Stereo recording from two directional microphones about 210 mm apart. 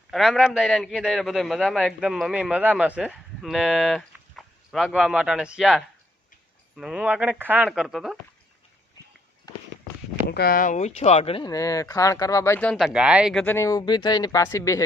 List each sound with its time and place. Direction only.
0.1 s a man's voice: centre (ahead or behind)
10.2 s speech: 45° left (ahead or behind); by 13.4 s 5° right (ahead or behind)
13.4 s speech: 10° left (ahead or behind)